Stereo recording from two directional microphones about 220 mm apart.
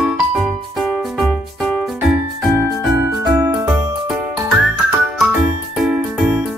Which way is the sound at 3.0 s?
10° right (ahead or behind).